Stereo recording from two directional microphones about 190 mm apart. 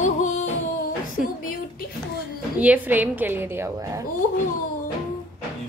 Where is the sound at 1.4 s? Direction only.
45° left (ahead or behind).